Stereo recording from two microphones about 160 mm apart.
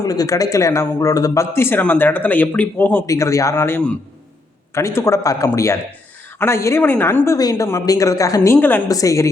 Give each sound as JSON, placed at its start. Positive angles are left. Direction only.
{"t": 0.0, "sound": "a man's voice", "side_deg": 20}